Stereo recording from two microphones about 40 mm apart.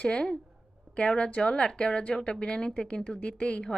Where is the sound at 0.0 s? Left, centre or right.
Left.